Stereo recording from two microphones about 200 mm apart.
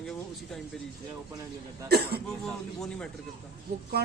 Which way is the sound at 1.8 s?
50° right (ahead or behind).